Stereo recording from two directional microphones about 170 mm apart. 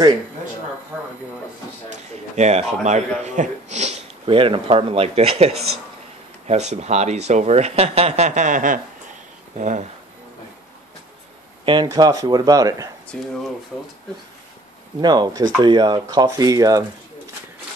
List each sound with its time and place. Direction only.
2.3 s speech: 40° right (ahead or behind)
11.6 s speech: 25° right (ahead or behind)
13.1 s speech: 5° left (ahead or behind)
15.0 s speech: 25° right (ahead or behind)